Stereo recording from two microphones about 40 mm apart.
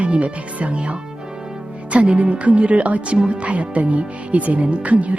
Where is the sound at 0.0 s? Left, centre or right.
Right.